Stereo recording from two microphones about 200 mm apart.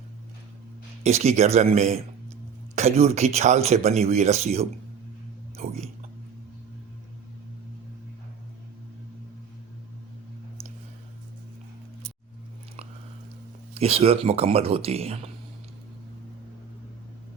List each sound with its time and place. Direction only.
1.0 s speech: 35° right (ahead or behind)
13.7 s speech: 30° right (ahead or behind)